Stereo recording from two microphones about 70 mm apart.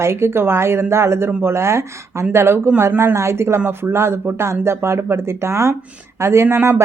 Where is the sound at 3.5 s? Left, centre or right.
Right.